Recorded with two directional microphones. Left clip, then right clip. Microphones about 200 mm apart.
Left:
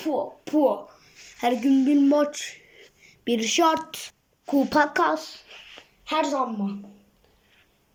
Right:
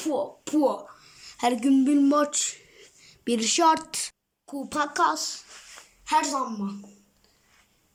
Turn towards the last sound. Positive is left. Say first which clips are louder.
# even
turn(degrees=-30)  # may be behind; listen again after turning